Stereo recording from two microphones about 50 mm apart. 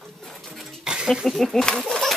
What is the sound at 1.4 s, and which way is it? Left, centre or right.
Speech, centre.